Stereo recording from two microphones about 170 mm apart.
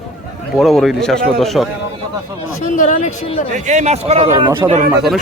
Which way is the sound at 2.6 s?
50° left (ahead or behind).